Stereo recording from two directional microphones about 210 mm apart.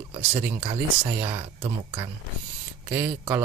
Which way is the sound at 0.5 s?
25° right (ahead or behind).